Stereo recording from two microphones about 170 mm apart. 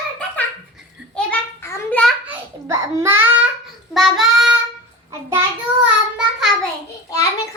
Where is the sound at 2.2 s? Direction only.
15° right (ahead or behind).